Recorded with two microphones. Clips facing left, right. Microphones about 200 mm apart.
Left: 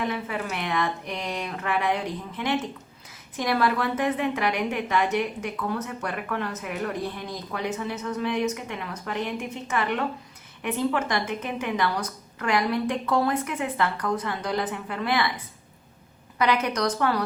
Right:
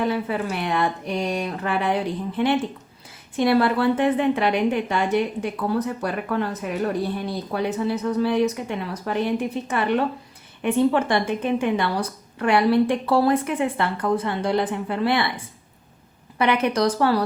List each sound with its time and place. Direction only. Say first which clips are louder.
0.0 s a woman's voice: right 5 dB; 35° right (ahead or behind)
16.4 s a woman's voice: right 4 dB; 25° right (ahead or behind)